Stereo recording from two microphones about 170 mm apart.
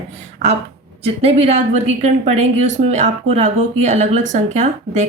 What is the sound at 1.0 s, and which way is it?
A woman's voice, 40° right (ahead or behind).